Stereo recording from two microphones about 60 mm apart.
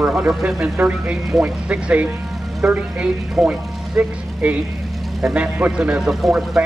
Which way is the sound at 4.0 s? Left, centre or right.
Right.